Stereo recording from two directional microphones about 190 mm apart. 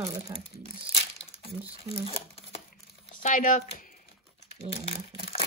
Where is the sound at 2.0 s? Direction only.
30° left (ahead or behind).